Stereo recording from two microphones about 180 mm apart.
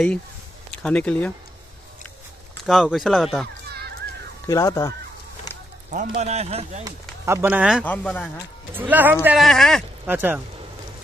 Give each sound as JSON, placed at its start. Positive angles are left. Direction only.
{"t": 0.8, "sound": "speech", "side_deg": 5}
{"t": 2.6, "sound": "speech", "side_deg": 0}
{"t": 4.5, "sound": "speech", "side_deg": 20}
{"t": 5.9, "sound": "a man's voice", "side_deg": -45}
{"t": 6.8, "sound": "speech", "side_deg": -15}
{"t": 7.8, "sound": "speech", "side_deg": 10}
{"t": 8.7, "sound": "speech", "side_deg": -10}
{"t": 10.0, "sound": "speech", "side_deg": -10}